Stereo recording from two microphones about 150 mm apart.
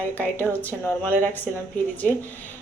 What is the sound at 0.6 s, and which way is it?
Speech, 10° left (ahead or behind).